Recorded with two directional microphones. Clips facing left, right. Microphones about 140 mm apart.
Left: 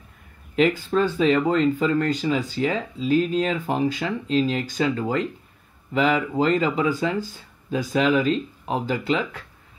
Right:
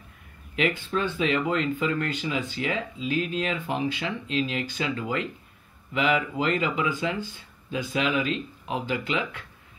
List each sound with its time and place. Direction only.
0.6 s speech: 40° left (ahead or behind)